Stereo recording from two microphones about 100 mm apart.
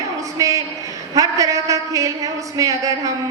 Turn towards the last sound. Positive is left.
turn(degrees=-35)  # may be behind; listen again after turning